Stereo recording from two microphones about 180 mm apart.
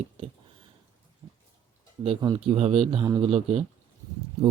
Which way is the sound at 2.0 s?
30° right (ahead or behind).